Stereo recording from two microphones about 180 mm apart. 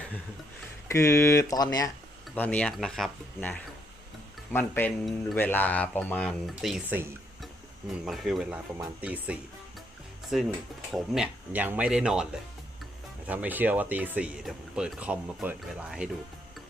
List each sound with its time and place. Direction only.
0.9 s speech: 15° left (ahead or behind)
2.3 s speech: 10° left (ahead or behind)